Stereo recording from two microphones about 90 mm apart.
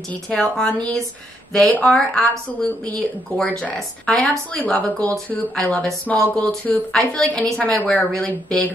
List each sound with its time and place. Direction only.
0.4 s a woman's voice: 10° left (ahead or behind)
4.7 s a woman's voice: 20° left (ahead or behind)
7.0 s a woman's voice: 5° left (ahead or behind)